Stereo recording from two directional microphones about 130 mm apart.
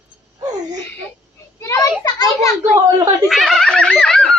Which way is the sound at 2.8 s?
30° right (ahead or behind).